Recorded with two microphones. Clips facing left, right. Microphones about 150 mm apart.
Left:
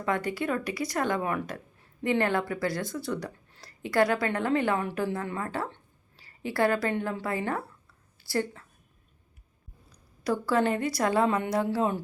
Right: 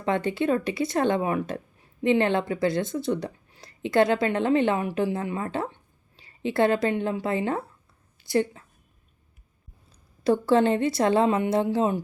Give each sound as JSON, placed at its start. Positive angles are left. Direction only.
{"t": 0.0, "sound": "a woman's voice", "side_deg": -25}
{"t": 9.9, "sound": "speech", "side_deg": -25}